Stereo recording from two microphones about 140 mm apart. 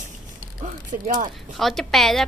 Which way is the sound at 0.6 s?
65° right (ahead or behind).